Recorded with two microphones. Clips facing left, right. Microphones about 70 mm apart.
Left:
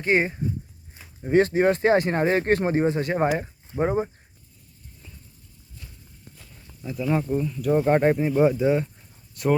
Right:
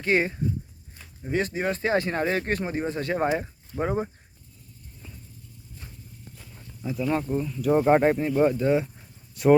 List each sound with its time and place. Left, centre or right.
0.0 s speech: centre
0.9 s a sound: centre
1.3 s speech: left
2.8 s speech: centre
3.7 s speech: centre
6.3 s speech: centre